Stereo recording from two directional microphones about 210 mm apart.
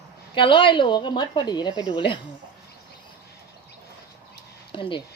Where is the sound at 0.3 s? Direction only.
25° left (ahead or behind).